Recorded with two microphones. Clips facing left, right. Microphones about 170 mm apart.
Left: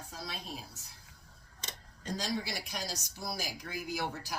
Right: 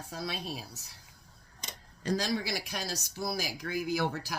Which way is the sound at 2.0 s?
85° right.